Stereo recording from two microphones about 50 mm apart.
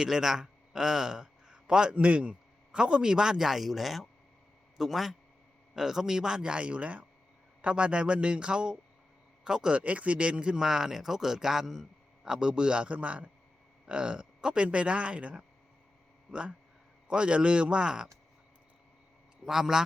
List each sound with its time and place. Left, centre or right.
0.0 s a man's voice: centre
9.7 s speech: right
19.5 s speech: centre